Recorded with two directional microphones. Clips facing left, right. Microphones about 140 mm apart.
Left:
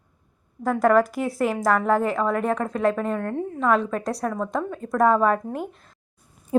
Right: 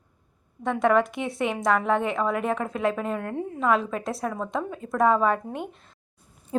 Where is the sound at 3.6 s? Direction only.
Centre (ahead or behind).